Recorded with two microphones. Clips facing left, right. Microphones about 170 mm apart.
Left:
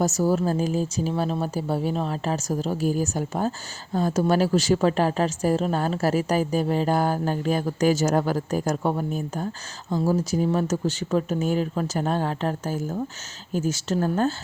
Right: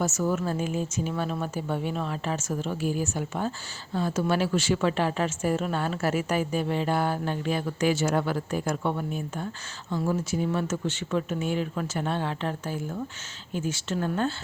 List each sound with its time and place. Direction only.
0.0 s speech: 35° left (ahead or behind)